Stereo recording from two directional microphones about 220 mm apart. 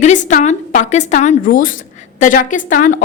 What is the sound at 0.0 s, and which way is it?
A woman's voice, 35° left (ahead or behind).